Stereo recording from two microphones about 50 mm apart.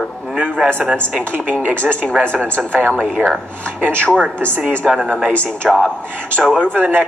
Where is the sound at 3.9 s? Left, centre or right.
Left.